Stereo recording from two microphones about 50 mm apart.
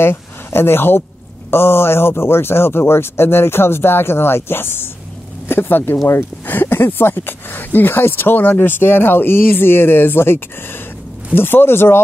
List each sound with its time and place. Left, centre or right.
0.0 s speech: left